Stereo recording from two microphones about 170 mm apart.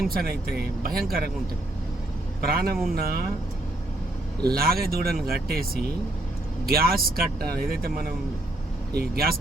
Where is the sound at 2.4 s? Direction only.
65° right (ahead or behind).